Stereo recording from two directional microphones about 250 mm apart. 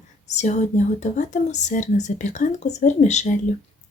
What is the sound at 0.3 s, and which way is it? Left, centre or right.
A woman's voice, left.